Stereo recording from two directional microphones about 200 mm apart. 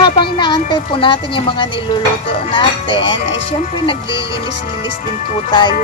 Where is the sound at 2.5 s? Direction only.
25° left (ahead or behind).